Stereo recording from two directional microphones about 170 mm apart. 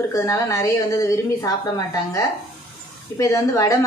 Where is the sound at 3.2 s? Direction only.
20° left (ahead or behind).